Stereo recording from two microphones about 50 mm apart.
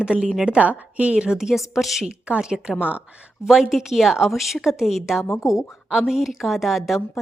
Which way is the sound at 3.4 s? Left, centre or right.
Centre.